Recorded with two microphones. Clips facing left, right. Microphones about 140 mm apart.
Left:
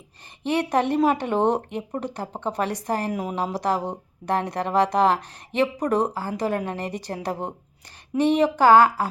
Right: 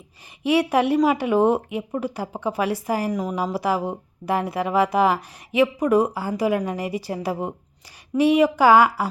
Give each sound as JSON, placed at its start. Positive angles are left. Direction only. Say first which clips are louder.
{"t": 0.4, "sound": "speech", "louder": "right 3 dB", "side_deg": -10}